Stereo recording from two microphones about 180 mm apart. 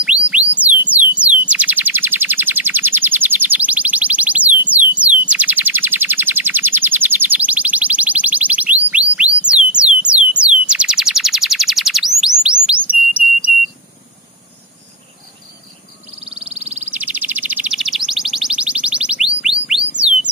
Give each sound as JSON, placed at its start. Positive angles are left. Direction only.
{"t": 0.0, "sound": "music", "side_deg": -5}
{"t": 9.5, "sound": "a sound", "side_deg": -5}
{"t": 16.3, "sound": "bird", "side_deg": -35}
{"t": 16.8, "sound": "chirp", "side_deg": -10}